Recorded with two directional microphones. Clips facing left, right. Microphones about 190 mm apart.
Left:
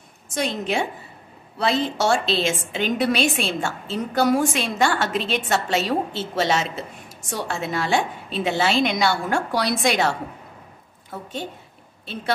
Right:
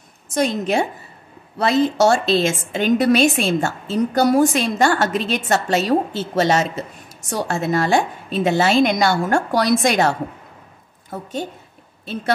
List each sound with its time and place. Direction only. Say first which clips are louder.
0.3 s a woman's voice: right 5 dB; 45° right (ahead or behind)